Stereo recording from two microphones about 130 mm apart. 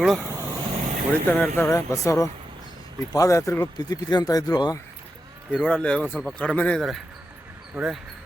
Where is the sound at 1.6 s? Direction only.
25° left (ahead or behind).